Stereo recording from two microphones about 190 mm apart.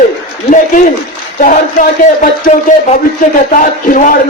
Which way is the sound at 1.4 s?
45° left (ahead or behind).